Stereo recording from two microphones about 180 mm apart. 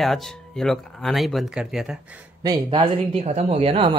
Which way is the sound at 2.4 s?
25° right (ahead or behind).